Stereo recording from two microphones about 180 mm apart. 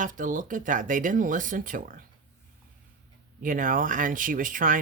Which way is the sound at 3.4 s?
50° right (ahead or behind).